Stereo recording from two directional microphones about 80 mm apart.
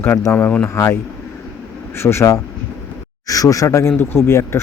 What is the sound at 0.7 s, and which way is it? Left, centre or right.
Speech, left.